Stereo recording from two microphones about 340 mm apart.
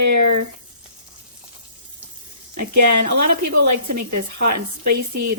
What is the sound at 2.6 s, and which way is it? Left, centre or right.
Speech, right.